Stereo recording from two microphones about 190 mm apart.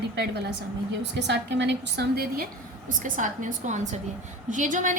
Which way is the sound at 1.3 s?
65° right (ahead or behind).